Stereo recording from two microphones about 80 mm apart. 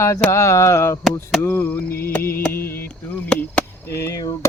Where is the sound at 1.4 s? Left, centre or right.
Left.